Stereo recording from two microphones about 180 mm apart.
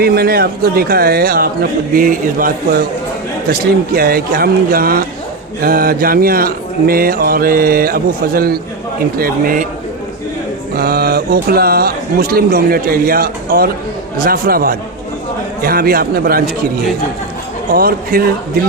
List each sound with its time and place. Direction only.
0.0 s mantra: 60° right (ahead or behind)
2.0 s a man's voice: 50° right (ahead or behind)
3.5 s mantra: 55° right (ahead or behind)
9.1 s a man's voice: 50° right (ahead or behind)
10.8 s mantra: 60° right (ahead or behind)
17.7 s mantra: 55° right (ahead or behind)